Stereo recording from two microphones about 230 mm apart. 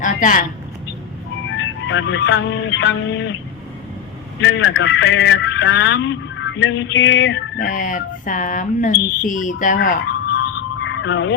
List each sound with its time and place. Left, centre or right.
0.0 s a sound: left
1.5 s music: left
4.4 s speech: left
7.7 s speech: left
10.8 s frog: left